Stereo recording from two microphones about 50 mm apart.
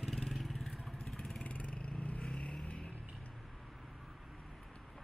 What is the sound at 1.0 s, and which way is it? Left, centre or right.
Vehicle, centre.